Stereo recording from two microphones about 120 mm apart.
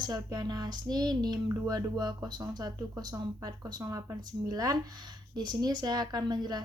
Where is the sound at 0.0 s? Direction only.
35° right (ahead or behind).